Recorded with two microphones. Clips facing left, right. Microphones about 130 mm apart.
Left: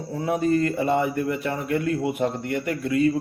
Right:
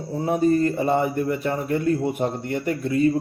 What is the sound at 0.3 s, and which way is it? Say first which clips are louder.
A man's voice: right 2 dB; 35° right (ahead or behind).